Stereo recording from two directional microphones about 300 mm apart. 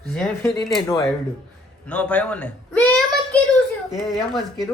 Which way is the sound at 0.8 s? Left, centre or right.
Centre.